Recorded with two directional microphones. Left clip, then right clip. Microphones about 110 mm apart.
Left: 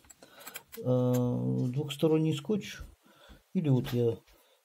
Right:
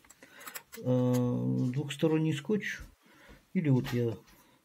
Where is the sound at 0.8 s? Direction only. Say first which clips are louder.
Left 1 dB; 15° left (ahead or behind).